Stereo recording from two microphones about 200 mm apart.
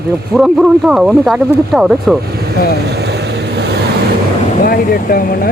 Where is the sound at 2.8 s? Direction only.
55° right (ahead or behind).